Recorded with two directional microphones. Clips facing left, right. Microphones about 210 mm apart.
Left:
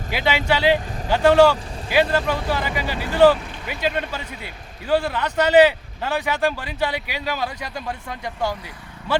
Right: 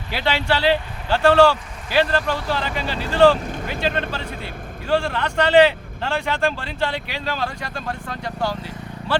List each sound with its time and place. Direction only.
0.1 s speech: 15° left (ahead or behind)